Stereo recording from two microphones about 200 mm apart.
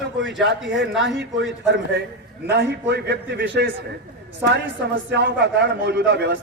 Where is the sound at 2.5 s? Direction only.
60° right (ahead or behind).